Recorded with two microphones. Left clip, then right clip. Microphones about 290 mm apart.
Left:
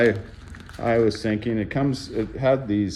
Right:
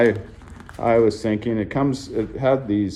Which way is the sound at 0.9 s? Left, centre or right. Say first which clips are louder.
Right 3 dB; centre.